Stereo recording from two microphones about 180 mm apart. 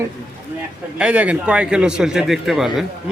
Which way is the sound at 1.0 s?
5° right (ahead or behind).